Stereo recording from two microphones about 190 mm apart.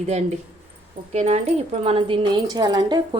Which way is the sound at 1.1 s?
35° right (ahead or behind).